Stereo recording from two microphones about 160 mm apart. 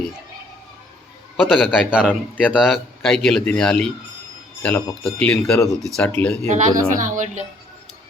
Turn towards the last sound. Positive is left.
turn(degrees=-50)  # may be behind; listen again after turning